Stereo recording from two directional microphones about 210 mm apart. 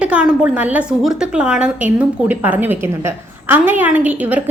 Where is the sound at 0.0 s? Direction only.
5° right (ahead or behind).